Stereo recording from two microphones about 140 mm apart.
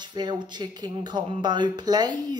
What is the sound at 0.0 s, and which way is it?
Speech, 30° right (ahead or behind).